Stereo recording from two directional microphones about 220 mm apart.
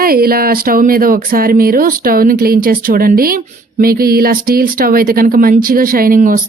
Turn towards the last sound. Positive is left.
turn(degrees=-40)  # may be behind; listen again after turning